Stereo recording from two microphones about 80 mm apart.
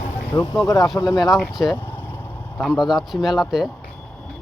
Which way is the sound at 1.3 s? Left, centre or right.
Centre.